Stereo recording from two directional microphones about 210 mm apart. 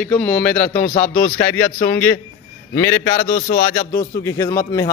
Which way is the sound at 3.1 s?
40° left (ahead or behind).